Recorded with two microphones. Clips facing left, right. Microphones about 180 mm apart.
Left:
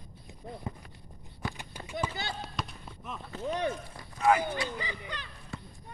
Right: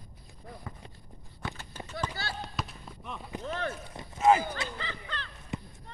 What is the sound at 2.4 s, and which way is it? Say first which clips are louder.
Basketball bounce: even; centre (ahead or behind).